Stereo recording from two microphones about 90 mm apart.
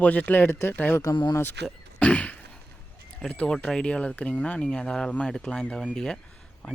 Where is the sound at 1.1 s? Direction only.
55° left (ahead or behind).